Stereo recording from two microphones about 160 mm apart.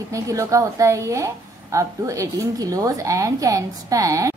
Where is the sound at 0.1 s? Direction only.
20° right (ahead or behind).